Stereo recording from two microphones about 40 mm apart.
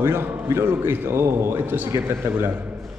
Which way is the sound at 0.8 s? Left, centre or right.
Right.